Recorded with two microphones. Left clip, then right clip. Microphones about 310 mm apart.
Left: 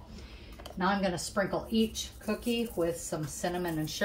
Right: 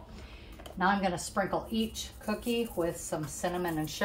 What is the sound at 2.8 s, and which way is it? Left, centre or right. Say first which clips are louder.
Speech: left 3 dB; centre.